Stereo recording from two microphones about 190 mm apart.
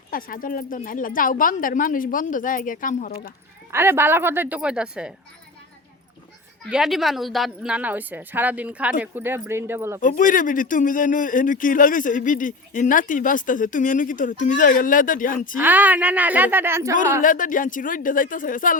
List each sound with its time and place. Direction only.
0.1 s speech: 50° left (ahead or behind)
3.7 s a woman's voice: 10° right (ahead or behind)
6.7 s a woman's voice: centre (ahead or behind)
10.0 s speech: 45° left (ahead or behind)
15.5 s a woman's voice: 10° right (ahead or behind)
17.2 s speech: 45° left (ahead or behind)